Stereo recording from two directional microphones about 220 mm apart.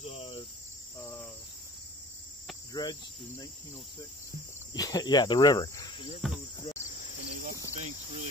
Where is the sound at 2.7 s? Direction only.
15° left (ahead or behind).